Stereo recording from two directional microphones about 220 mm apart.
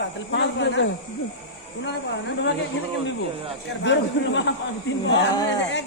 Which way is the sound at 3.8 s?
55° left (ahead or behind).